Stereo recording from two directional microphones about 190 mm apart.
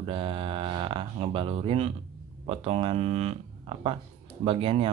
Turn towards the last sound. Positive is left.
turn(degrees=-30)  # may be behind; listen again after turning